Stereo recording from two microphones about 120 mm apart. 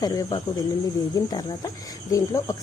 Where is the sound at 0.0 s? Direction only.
35° left (ahead or behind).